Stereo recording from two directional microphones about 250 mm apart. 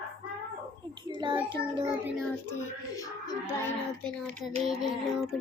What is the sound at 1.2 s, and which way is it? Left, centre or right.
Speech, centre.